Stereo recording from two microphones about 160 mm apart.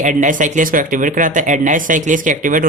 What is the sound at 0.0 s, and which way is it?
Speech, 55° right (ahead or behind).